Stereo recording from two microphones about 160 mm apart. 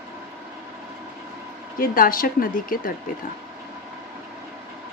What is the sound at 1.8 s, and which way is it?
A woman's voice, 65° left (ahead or behind).